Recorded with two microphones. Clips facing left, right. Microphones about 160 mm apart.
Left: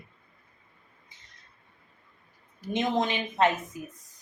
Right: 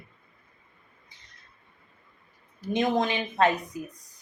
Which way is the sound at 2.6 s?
20° left (ahead or behind).